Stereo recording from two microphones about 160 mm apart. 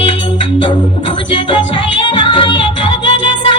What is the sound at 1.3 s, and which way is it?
Music, 30° left (ahead or behind).